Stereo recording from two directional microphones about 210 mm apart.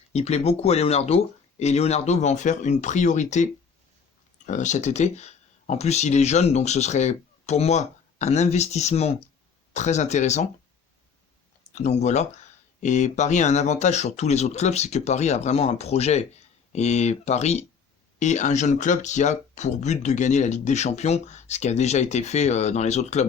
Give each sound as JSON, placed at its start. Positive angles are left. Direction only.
{"t": 0.1, "sound": "speech", "side_deg": 30}
{"t": 11.7, "sound": "speech", "side_deg": 30}